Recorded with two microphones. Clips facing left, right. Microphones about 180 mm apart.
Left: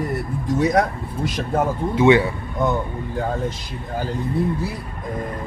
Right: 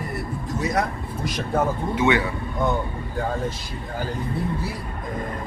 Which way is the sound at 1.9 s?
30° left (ahead or behind).